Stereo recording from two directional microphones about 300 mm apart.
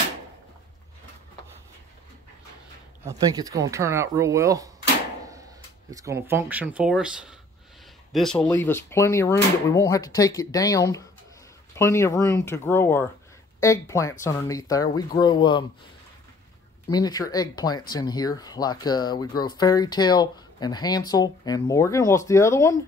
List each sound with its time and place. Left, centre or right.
3.1 s speech: centre
16.9 s speech: centre